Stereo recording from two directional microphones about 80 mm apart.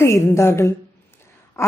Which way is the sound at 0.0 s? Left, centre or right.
Left.